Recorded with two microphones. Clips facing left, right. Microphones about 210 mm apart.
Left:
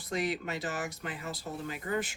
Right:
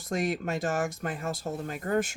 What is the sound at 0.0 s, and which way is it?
Speech, 45° right (ahead or behind).